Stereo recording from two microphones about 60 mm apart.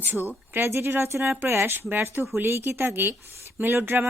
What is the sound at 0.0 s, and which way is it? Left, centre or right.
Speech, right.